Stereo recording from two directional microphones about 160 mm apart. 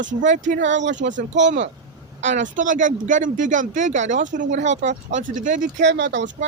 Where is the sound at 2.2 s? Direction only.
50° right (ahead or behind).